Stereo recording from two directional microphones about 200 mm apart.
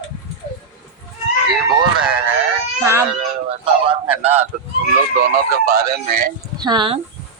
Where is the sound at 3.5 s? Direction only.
30° right (ahead or behind).